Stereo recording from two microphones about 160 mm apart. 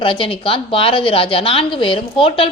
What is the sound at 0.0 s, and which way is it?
A woman's voice, 35° left (ahead or behind).